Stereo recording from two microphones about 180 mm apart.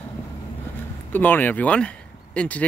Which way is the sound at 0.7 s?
10° left (ahead or behind).